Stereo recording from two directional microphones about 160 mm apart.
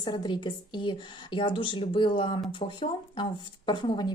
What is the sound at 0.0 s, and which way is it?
A woman's voice, 25° left (ahead or behind).